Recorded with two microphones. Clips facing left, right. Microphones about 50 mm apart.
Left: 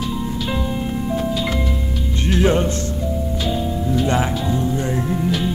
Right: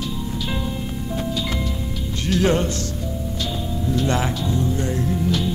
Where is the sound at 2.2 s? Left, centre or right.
Left.